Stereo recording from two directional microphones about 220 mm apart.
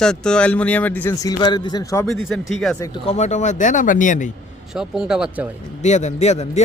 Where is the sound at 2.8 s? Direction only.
20° left (ahead or behind).